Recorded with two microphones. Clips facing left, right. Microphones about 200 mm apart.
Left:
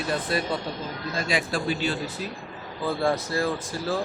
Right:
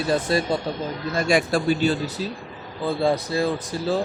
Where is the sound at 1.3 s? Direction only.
45° right (ahead or behind).